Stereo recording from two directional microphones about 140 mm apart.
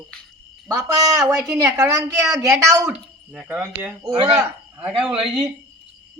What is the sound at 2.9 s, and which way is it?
Speech, 10° right (ahead or behind).